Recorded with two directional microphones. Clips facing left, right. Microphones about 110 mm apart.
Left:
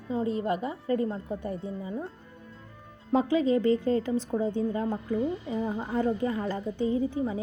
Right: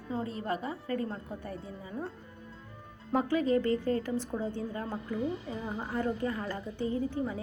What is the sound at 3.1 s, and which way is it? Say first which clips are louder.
A woman's voice: left 4 dB; 20° left (ahead or behind).